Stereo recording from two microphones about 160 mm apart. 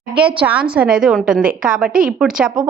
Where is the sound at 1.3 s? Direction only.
65° right (ahead or behind).